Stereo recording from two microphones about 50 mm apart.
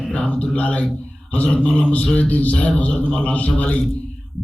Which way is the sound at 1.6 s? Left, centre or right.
Left.